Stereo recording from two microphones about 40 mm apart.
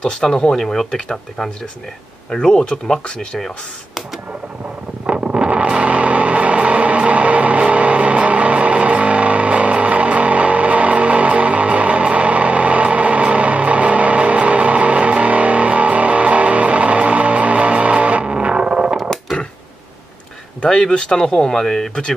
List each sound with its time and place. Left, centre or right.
0.0 s speech: centre
2.7 s speech: left
3.3 s speech: centre
5.0 s wind noise: right
5.8 s vehicle: right
18.2 s music: right
18.9 s a sound: centre
20.6 s speech: left